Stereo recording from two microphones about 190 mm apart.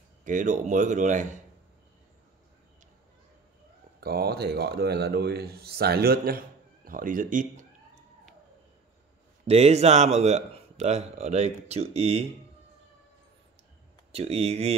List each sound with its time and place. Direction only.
0.2 s a man's voice: 40° right (ahead or behind)
4.0 s a man's voice: 55° right (ahead or behind)
9.5 s a man's voice: 35° right (ahead or behind)
14.1 s a man's voice: 35° right (ahead or behind)